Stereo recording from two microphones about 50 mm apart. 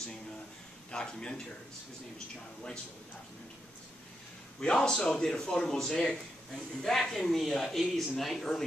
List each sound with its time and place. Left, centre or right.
0.9 s speech: centre
4.6 s speech: centre